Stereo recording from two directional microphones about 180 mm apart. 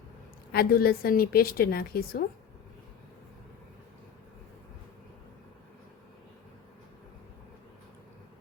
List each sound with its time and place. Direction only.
0.5 s a woman's voice: 55° left (ahead or behind)